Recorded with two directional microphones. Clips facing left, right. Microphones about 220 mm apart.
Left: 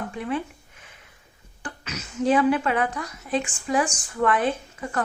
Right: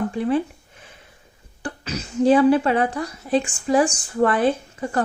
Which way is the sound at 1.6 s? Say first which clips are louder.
Right 6 dB; 35° right (ahead or behind).